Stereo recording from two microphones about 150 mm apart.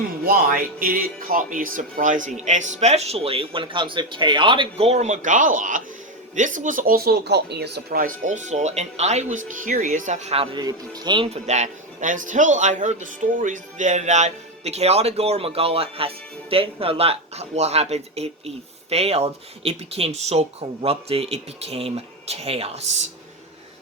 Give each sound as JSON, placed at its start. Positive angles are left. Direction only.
{"t": 0.3, "sound": "speech", "side_deg": -70}
{"t": 11.4, "sound": "speech", "side_deg": -50}